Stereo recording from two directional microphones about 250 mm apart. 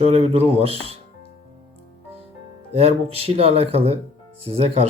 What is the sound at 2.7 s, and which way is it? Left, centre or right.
A man's voice, right.